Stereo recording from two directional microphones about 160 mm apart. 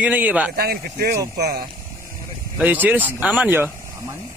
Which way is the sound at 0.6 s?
80° right.